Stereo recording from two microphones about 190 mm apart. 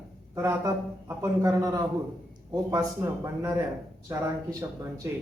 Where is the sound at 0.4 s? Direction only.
15° right (ahead or behind).